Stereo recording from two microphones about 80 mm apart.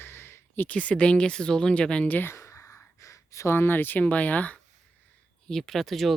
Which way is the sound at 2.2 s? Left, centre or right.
Left.